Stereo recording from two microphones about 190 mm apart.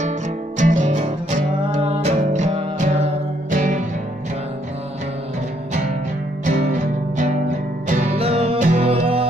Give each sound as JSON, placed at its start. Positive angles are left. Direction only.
{"t": 0.6, "sound": "music", "side_deg": -40}
{"t": 6.4, "sound": "music", "side_deg": -40}